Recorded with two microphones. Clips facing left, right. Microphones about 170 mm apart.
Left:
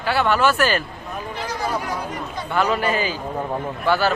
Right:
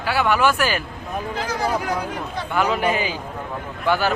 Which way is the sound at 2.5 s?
15° right (ahead or behind).